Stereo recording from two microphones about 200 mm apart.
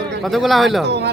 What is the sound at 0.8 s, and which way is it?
Speech, 55° right (ahead or behind).